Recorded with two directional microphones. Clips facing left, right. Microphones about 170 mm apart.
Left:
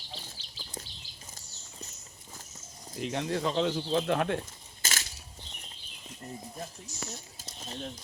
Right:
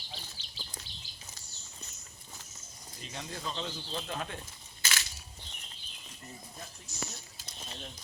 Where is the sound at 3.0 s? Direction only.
70° left (ahead or behind).